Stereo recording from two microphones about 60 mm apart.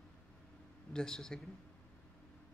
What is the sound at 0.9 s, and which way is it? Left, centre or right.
Speech, centre.